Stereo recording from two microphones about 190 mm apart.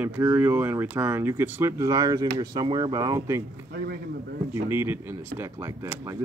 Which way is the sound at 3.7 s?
55° right (ahead or behind).